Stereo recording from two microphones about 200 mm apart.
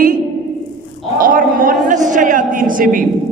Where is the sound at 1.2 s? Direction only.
45° right (ahead or behind).